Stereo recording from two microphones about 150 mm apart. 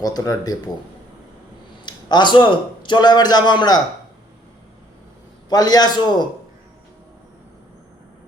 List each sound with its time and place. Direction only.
0.0 s a man's voice: 25° left (ahead or behind)
1.8 s a man's voice: 30° left (ahead or behind)
5.5 s a man's voice: 25° left (ahead or behind)